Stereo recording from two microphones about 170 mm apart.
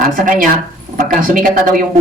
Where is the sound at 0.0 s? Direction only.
55° right (ahead or behind).